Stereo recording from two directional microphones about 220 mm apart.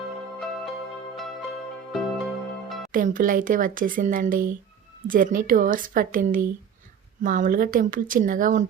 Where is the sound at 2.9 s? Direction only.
40° right (ahead or behind).